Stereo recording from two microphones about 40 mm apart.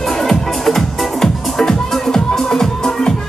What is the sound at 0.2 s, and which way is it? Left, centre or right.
Music, centre.